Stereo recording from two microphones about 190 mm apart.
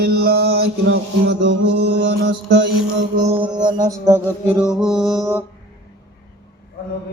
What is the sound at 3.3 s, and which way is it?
Music, 25° right (ahead or behind).